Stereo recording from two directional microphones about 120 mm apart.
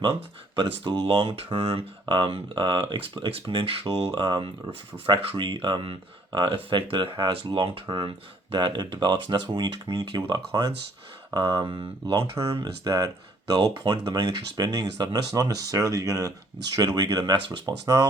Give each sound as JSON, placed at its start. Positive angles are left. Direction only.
{"t": 0.0, "sound": "speech", "side_deg": -45}
{"t": 4.1, "sound": "speech", "side_deg": -40}